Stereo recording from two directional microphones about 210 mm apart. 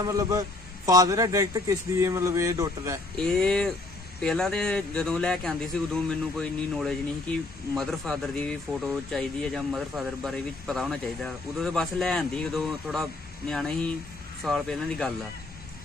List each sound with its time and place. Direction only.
0.1 s speech: 15° right (ahead or behind)
3.2 s a man's voice: 5° left (ahead or behind)